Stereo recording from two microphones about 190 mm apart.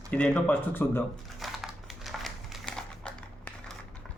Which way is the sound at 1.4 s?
Centre (ahead or behind).